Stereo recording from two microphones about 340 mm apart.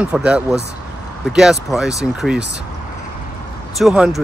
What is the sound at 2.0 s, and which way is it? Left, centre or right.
Speech, centre.